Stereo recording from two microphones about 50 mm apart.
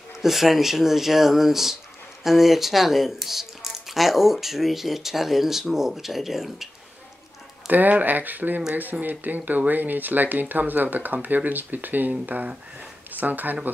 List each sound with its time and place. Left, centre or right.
0.1 s speech: centre
7.6 s speech: right